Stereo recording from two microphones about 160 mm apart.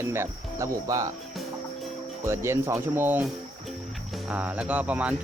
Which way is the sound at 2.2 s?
15° right (ahead or behind).